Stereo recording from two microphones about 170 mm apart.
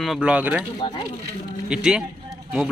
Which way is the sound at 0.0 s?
5° right (ahead or behind).